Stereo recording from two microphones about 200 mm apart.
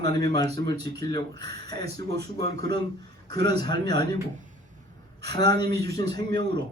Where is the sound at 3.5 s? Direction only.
55° right (ahead or behind).